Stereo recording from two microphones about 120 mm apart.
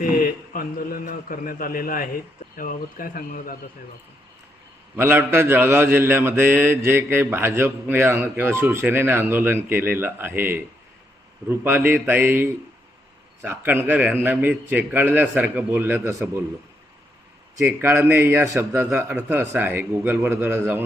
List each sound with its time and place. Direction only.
0.5 s mantra: 90° left
4.9 s a man's voice: 20° right (ahead or behind)
17.7 s a man's voice: 15° right (ahead or behind)